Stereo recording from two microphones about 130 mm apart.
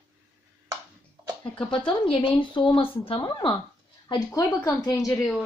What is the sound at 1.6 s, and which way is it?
Speech, 40° left (ahead or behind).